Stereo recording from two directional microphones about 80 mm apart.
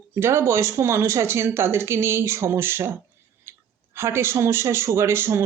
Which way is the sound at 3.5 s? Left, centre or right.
Right.